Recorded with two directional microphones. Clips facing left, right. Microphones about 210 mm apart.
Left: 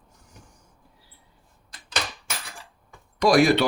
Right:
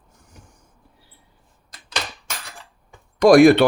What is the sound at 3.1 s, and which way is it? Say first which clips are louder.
Speech: right 8 dB; 50° right (ahead or behind).